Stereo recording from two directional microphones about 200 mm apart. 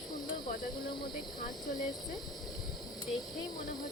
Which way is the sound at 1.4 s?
40° left (ahead or behind).